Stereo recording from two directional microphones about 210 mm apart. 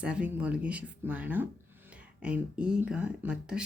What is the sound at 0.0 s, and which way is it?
Speech, 5° right (ahead or behind).